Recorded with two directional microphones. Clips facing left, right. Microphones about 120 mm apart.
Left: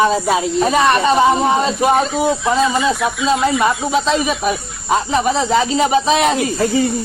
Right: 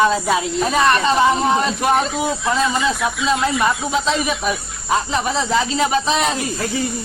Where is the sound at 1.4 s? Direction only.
5° left (ahead or behind).